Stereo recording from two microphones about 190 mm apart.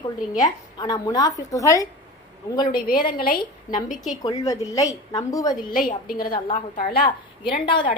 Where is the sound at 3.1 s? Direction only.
50° left (ahead or behind).